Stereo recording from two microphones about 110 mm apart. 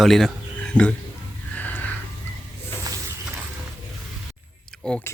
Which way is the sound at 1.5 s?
15° left (ahead or behind).